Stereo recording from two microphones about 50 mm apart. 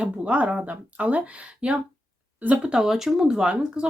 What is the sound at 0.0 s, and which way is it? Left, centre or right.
Speech, right.